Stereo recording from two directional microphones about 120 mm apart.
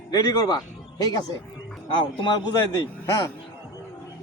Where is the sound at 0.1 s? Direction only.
35° left (ahead or behind).